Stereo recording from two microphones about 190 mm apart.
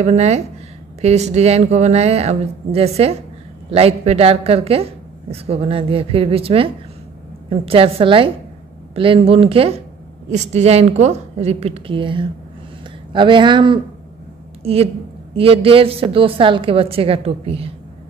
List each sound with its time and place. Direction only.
0.0 s a woman's voice: 35° right (ahead or behind)